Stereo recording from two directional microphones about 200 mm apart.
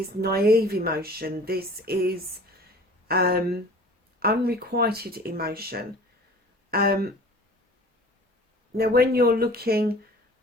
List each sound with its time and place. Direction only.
0.2 s speech: 50° right (ahead or behind)
8.7 s speech: 50° right (ahead or behind)